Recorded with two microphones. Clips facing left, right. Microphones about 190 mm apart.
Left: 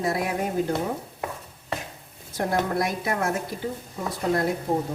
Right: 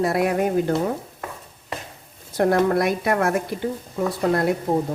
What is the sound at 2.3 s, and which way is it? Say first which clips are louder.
A woman's voice: right 7 dB; 60° right (ahead or behind).